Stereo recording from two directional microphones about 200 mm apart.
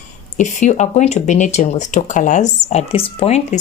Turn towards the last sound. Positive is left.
turn(degrees=30)  # may be behind; listen again after turning